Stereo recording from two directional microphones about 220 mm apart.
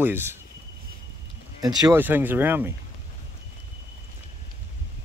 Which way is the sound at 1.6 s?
15° right (ahead or behind).